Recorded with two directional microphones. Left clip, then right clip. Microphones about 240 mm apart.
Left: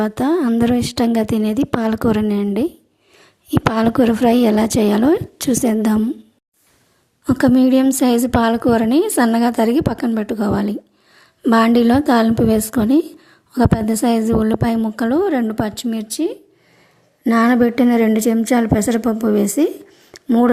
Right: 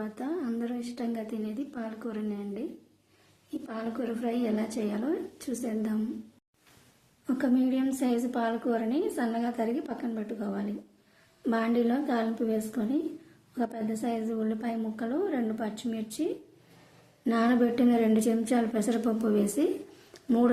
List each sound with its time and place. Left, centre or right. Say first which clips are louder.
0.0 s speech: left 17 dB; left
3.7 s speech: left 19 dB; left
7.3 s a woman's voice: left 14 dB; left
20.1 s a sound: left 11 dB; left